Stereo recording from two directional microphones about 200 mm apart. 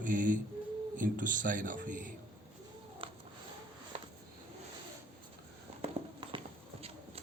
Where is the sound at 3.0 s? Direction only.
25° right (ahead or behind).